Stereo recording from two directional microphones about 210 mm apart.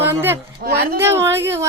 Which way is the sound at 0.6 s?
50° right (ahead or behind).